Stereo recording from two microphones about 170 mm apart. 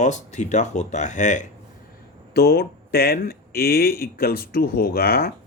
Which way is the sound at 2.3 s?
70° left (ahead or behind).